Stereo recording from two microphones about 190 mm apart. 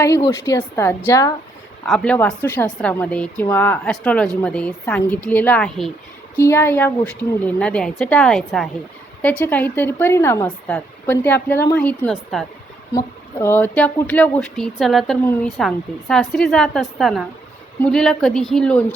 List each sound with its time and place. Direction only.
0.0 s a woman's voice: 15° left (ahead or behind)
1.8 s a woman's voice: 5° left (ahead or behind)
6.3 s a woman's voice: 15° left (ahead or behind)